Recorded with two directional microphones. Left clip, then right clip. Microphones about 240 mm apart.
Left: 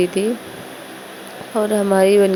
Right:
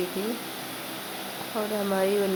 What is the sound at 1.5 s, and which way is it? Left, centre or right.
Speech, left.